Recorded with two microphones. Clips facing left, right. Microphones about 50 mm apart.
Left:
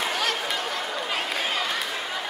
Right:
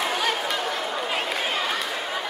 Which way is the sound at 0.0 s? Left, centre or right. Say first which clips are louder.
Right 2 dB; centre.